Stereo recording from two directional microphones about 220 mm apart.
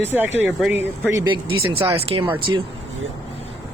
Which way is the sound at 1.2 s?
20° right (ahead or behind).